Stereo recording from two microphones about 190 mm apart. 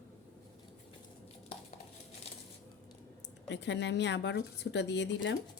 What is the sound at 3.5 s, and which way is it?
Speech, 65° left (ahead or behind).